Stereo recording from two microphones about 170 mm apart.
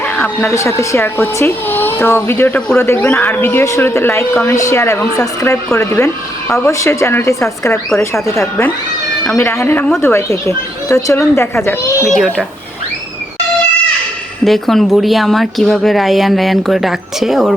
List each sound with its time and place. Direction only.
0.0 s speech: 10° left (ahead or behind)
12.1 s a woman's voice: centre (ahead or behind)
14.4 s a woman's voice: centre (ahead or behind)